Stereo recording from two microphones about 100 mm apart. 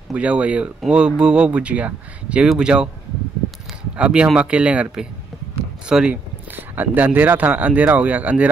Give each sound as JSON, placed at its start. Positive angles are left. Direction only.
{"t": 0.1, "sound": "speech", "side_deg": -10}
{"t": 3.9, "sound": "speech", "side_deg": -10}
{"t": 6.5, "sound": "speech", "side_deg": -20}